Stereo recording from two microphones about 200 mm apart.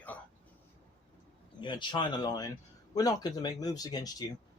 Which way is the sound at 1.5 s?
25° left (ahead or behind).